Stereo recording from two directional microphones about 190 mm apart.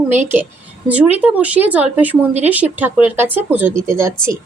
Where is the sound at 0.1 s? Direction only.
10° right (ahead or behind).